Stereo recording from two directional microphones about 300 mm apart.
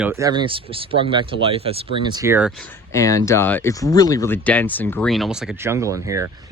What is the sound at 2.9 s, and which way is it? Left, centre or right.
Speech, centre.